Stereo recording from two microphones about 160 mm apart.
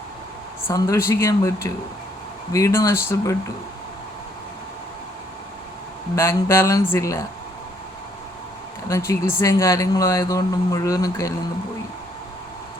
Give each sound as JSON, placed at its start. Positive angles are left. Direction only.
{"t": 0.7, "sound": "speech", "side_deg": 15}
{"t": 6.1, "sound": "speech", "side_deg": 15}
{"t": 8.9, "sound": "speech", "side_deg": 15}